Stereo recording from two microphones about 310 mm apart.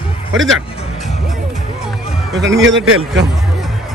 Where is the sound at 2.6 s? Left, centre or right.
Right.